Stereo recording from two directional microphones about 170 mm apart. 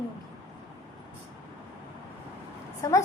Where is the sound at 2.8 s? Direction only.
20° left (ahead or behind).